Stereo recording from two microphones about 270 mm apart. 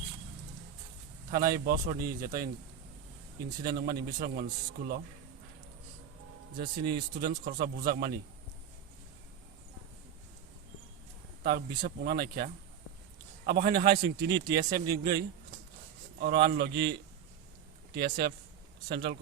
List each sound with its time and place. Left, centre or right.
1.3 s a man's voice: right
3.6 s a man's voice: right
6.6 s a man's voice: right
11.4 s a man's voice: right
16.2 s a man's voice: right
17.9 s a man's voice: right